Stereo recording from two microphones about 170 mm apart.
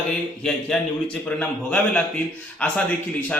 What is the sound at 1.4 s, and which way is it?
A man's voice, 5° left (ahead or behind).